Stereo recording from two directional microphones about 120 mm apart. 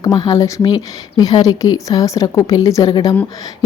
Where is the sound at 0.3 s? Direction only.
25° left (ahead or behind).